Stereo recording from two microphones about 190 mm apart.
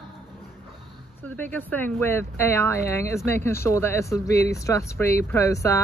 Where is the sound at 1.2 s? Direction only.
10° left (ahead or behind).